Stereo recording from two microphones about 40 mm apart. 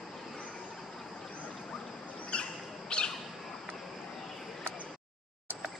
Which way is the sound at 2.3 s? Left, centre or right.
Left.